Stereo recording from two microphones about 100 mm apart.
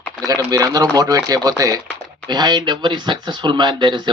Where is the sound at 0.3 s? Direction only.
40° right (ahead or behind).